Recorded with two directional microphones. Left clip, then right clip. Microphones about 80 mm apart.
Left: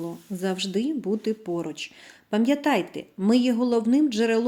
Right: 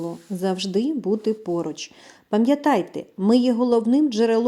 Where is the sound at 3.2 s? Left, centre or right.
Right.